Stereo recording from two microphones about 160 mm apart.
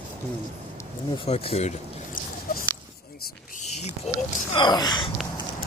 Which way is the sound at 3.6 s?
45° left (ahead or behind).